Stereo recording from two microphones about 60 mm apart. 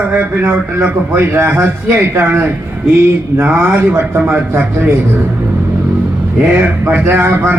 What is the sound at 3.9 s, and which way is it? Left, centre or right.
Speech, right.